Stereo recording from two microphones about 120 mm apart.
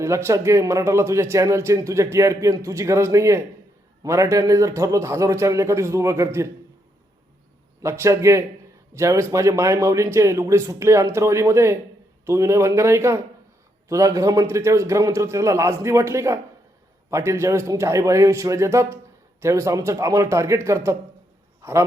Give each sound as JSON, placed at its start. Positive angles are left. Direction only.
{"t": 0.0, "sound": "speech", "side_deg": -25}
{"t": 7.8, "sound": "a man's voice", "side_deg": -25}